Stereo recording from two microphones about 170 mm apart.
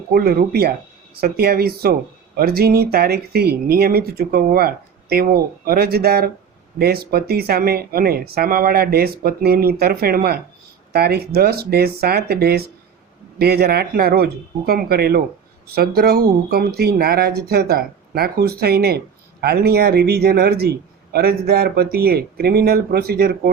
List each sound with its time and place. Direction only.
0.1 s speech: 60° right (ahead or behind)